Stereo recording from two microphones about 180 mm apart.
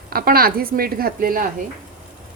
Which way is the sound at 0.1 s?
55° right (ahead or behind).